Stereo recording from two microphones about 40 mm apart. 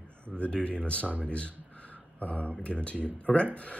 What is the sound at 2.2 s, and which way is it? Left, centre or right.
Speech, left.